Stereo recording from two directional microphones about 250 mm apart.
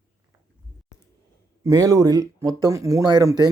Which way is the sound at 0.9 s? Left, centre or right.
Right.